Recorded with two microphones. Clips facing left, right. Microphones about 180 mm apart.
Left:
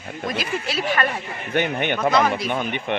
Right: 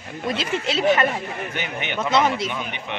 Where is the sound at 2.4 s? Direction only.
50° left (ahead or behind).